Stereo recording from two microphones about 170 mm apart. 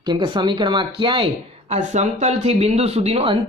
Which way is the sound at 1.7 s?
45° right (ahead or behind).